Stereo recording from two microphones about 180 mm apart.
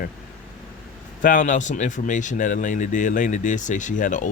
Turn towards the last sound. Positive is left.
turn(degrees=45)  # may be behind; listen again after turning